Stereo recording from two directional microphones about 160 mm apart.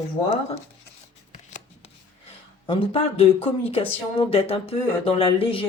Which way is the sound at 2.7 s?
35° left (ahead or behind).